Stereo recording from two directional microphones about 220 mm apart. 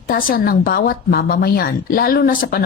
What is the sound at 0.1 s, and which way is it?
A woman's voice, 40° left (ahead or behind).